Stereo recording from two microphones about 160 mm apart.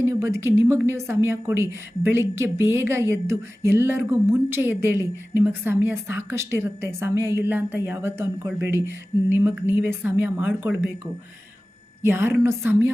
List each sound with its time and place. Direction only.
0.0 s a woman's voice: 15° right (ahead or behind)